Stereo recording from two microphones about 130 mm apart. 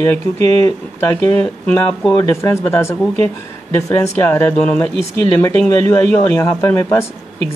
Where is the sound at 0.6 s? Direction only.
20° left (ahead or behind).